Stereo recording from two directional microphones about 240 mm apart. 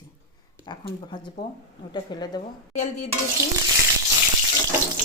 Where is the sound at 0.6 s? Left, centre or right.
Centre.